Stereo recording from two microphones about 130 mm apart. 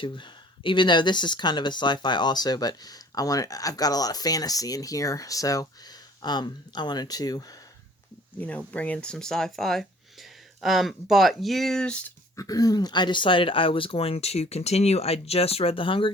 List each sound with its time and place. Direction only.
0.0 s speech: 40° left (ahead or behind)
8.4 s speech: 10° left (ahead or behind)
12.4 s speech: 30° left (ahead or behind)